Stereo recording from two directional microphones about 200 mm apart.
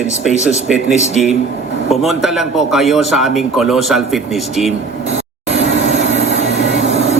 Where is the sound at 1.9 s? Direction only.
Centre (ahead or behind).